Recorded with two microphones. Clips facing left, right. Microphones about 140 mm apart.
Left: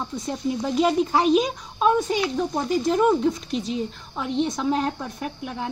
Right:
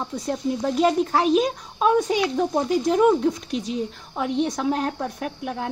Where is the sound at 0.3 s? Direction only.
Centre (ahead or behind).